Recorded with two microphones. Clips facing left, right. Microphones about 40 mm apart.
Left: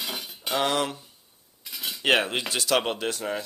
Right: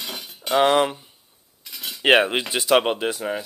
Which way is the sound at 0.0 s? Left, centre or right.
Centre.